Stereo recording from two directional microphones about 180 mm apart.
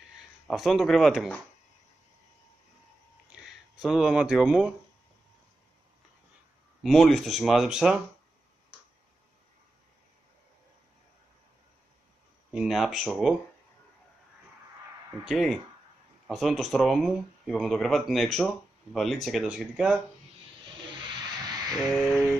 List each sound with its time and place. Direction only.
0.5 s speech: centre (ahead or behind)
3.8 s speech: 5° right (ahead or behind)
6.8 s speech: centre (ahead or behind)
12.5 s speech: centre (ahead or behind)
15.2 s speech: centre (ahead or behind)
21.0 s a sound: 25° right (ahead or behind)
21.8 s a sound: centre (ahead or behind)